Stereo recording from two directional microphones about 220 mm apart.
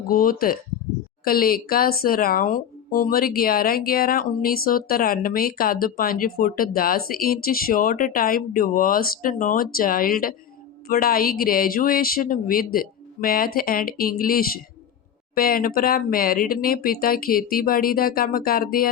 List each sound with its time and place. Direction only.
0.1 s speech: 40° left (ahead or behind)